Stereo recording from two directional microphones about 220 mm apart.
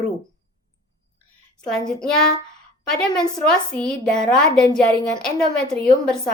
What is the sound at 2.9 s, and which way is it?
A woman's voice, 5° left (ahead or behind).